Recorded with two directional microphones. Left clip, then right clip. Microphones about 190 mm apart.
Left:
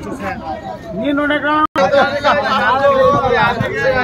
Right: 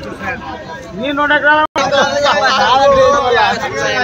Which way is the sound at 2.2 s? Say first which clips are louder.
Right 3 dB; 50° right (ahead or behind).